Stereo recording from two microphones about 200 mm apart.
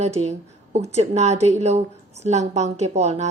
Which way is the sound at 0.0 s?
35° right (ahead or behind).